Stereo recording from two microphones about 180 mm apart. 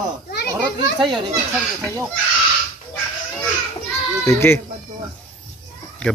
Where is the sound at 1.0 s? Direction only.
25° right (ahead or behind).